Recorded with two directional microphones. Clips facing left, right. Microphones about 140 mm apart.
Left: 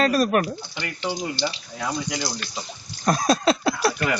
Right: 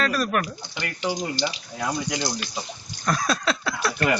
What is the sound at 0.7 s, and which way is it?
Speech, 10° right (ahead or behind).